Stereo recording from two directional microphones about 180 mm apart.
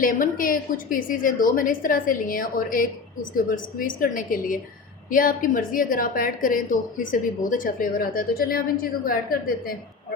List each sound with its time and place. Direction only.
0.0 s a woman's voice: 50° left (ahead or behind)